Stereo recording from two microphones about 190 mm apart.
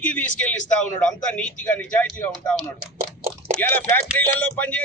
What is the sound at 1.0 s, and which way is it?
A man's voice, 5° left (ahead or behind).